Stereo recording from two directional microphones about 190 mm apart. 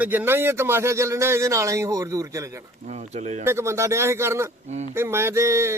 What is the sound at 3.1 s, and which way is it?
Speech, 35° right (ahead or behind).